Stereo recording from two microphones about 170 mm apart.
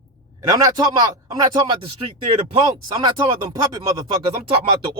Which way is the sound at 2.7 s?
25° right (ahead or behind).